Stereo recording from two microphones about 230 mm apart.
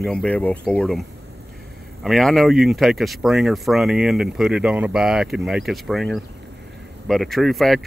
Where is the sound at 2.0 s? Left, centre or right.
Centre.